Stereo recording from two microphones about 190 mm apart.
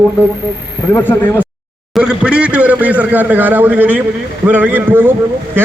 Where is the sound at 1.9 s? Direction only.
5° right (ahead or behind).